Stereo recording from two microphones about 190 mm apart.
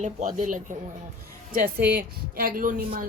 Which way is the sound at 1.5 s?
55° right (ahead or behind).